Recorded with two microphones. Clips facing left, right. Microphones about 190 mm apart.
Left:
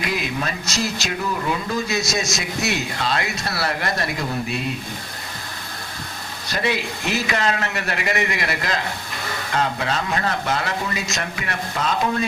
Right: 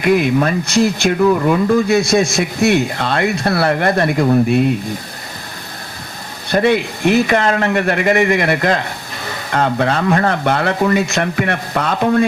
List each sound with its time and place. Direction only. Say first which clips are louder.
0.0 s speech: right 12 dB; 55° right (ahead or behind)
6.5 s speech: right 10 dB; 55° right (ahead or behind)